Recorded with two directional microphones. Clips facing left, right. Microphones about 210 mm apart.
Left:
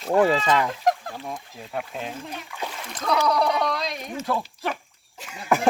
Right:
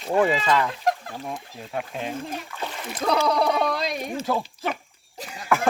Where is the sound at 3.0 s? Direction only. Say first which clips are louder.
Right 1 dB; 30° right (ahead or behind).